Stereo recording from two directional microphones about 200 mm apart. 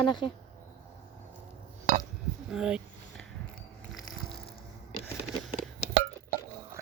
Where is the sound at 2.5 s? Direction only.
5° right (ahead or behind).